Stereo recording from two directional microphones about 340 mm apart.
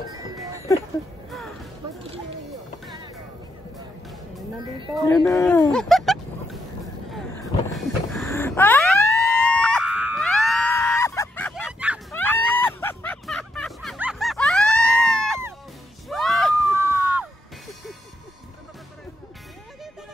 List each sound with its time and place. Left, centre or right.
1.3 s music: centre
5.0 s a sound: centre
7.7 s emergency vehicle: centre
16.1 s music: centre